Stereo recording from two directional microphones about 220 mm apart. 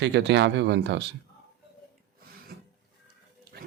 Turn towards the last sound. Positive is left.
turn(degrees=-45)  # may be behind; listen again after turning